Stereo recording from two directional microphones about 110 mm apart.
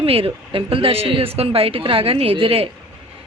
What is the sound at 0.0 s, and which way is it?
A woman's voice, 60° right (ahead or behind).